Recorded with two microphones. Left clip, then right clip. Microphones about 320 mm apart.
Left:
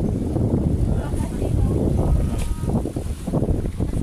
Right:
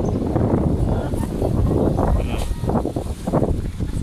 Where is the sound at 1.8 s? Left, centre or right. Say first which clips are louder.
Right 5 dB; right.